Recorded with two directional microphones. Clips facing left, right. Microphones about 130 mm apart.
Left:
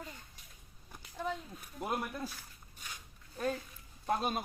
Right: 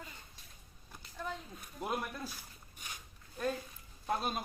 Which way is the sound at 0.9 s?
10° left (ahead or behind).